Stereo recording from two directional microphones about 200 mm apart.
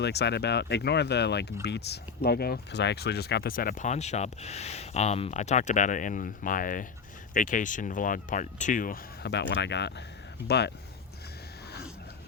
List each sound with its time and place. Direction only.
0.0 s speech: 55° left (ahead or behind)